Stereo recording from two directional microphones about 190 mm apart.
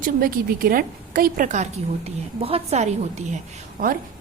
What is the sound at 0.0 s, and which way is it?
A woman's voice, 50° right (ahead or behind).